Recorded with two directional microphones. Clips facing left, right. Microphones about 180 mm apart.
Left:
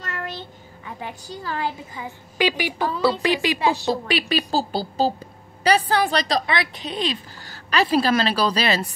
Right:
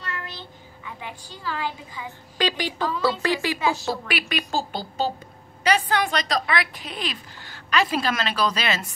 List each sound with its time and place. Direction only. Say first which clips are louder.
0.0 s a sound: left 4 dB; 45° left (ahead or behind)
0.8 s a woman's voice: left 4 dB; 40° left (ahead or behind)
2.3 s a woman's voice: left 3 dB; 10° left (ahead or behind)
3.5 s a woman's voice: left 3 dB; 35° left (ahead or behind)
7.4 s a woman's voice: left 2 dB; 35° left (ahead or behind)